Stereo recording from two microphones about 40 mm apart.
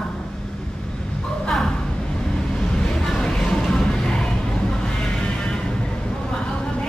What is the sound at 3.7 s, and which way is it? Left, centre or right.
Music, centre.